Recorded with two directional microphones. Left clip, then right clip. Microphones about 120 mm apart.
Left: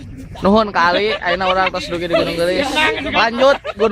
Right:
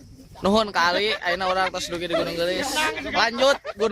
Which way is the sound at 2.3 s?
60° right (ahead or behind).